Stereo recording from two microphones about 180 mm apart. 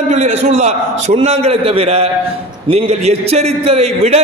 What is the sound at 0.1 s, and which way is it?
A man's voice, 40° right (ahead or behind).